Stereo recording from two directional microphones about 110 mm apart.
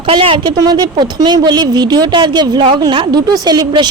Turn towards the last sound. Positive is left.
turn(degrees=-40)  # may be behind; listen again after turning